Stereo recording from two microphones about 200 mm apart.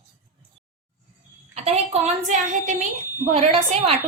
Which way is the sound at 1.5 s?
30° right (ahead or behind).